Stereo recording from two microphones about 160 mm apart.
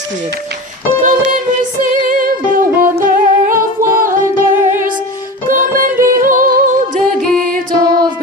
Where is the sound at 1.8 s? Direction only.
55° right (ahead or behind).